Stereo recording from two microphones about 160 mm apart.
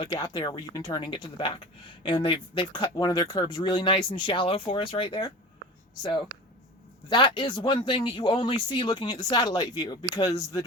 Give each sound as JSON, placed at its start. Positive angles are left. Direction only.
{"t": 0.0, "sound": "speech", "side_deg": 30}